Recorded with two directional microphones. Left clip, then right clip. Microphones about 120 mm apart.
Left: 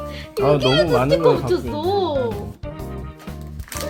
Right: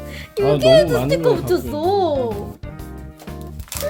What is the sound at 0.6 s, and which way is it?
Speech, 45° right (ahead or behind).